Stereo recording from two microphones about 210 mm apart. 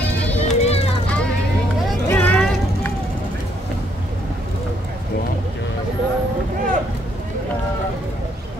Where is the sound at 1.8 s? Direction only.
5° left (ahead or behind).